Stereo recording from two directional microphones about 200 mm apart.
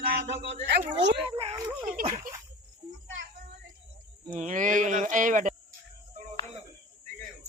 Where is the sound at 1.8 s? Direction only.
45° right (ahead or behind).